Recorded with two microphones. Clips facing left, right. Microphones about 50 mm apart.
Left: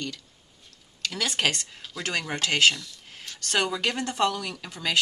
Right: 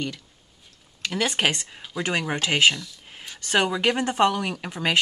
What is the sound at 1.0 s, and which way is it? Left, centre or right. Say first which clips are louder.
Speech: right 3 dB; right.